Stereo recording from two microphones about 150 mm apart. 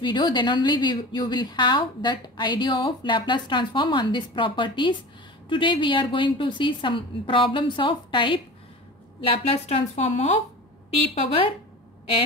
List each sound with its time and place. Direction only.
0.0 s a woman's voice: 30° left (ahead or behind)